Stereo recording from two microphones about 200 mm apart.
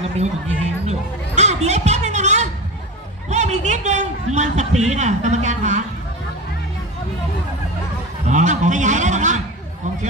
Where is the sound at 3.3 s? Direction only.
35° right (ahead or behind).